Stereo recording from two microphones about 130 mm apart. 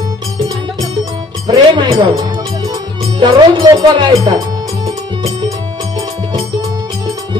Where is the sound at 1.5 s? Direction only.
30° right (ahead or behind).